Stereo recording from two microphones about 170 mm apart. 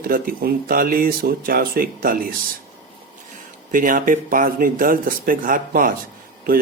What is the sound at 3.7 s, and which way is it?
Speech, 55° right (ahead or behind).